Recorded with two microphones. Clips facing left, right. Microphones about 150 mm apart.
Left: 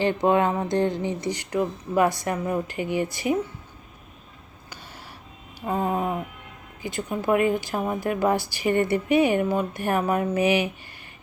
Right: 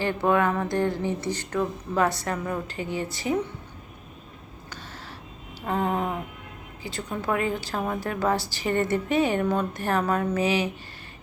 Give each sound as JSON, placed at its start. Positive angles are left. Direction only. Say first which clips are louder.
{"t": 0.0, "sound": "speech", "louder": "left 2 dB", "side_deg": 20}
{"t": 5.6, "sound": "a sound", "louder": "left 1 dB", "side_deg": 15}
{"t": 6.8, "sound": "speech", "louder": "left 4 dB", "side_deg": 15}